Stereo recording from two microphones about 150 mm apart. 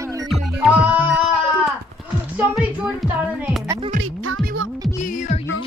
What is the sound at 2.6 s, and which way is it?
Speech, 5° right (ahead or behind).